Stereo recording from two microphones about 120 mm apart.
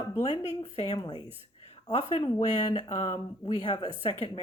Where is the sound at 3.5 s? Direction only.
40° left (ahead or behind).